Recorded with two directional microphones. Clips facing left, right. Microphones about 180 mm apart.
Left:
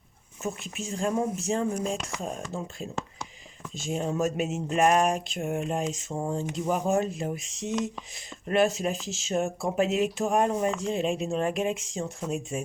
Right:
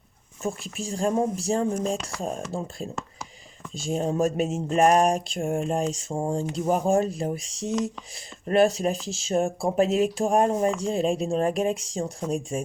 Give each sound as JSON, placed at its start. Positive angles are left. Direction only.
{"t": 0.4, "sound": "speech", "side_deg": -35}